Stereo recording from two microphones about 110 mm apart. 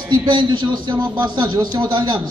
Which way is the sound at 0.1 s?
45° right (ahead or behind).